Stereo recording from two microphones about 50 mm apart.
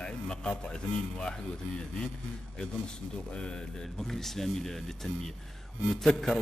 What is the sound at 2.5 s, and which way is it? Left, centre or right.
A man's voice, centre.